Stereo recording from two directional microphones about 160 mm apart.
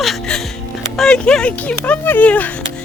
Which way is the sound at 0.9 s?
5° left (ahead or behind).